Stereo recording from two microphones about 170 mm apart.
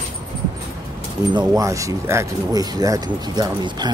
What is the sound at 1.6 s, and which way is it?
Speech, 20° right (ahead or behind).